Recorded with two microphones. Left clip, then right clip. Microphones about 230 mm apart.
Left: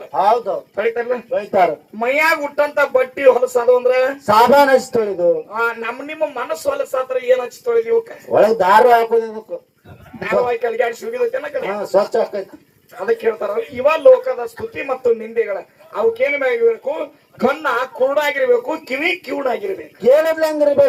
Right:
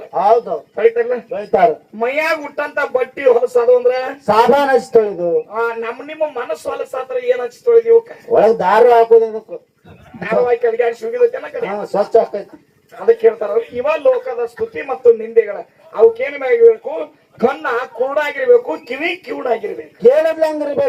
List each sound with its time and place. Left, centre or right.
0.2 s speech: left